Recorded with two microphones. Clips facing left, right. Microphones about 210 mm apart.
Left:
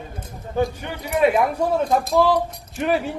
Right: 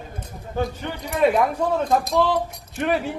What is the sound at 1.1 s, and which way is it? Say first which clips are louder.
A man's voice: left 1 dB; 10° left (ahead or behind).